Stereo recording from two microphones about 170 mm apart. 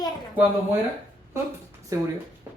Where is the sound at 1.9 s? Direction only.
20° right (ahead or behind).